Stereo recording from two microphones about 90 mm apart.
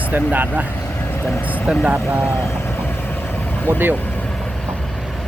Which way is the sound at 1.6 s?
15° right (ahead or behind).